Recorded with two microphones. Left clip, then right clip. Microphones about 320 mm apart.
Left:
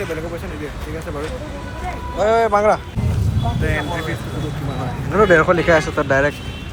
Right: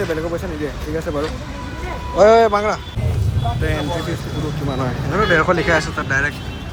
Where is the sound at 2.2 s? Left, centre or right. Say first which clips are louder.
Right 5 dB; centre.